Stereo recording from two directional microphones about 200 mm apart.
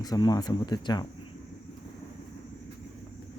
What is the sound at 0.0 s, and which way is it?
Speech, 20° left (ahead or behind).